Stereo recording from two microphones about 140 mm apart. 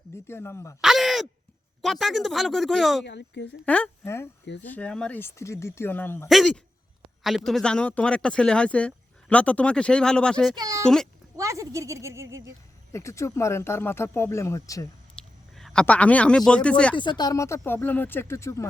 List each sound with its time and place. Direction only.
0.3 s speech: 20° left (ahead or behind)
0.8 s speech: centre (ahead or behind)
3.7 s speech: 15° left (ahead or behind)
6.2 s speech: centre (ahead or behind)
10.5 s a child's voice: 25° right (ahead or behind)
10.8 s speech: 5° left (ahead or behind)
11.3 s speech: 20° right (ahead or behind)
12.9 s speech: 20° left (ahead or behind)
15.1 s speech: 5° left (ahead or behind)
16.9 s speech: 35° left (ahead or behind)